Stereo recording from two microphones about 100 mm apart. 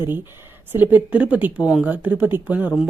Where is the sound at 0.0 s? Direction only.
25° right (ahead or behind).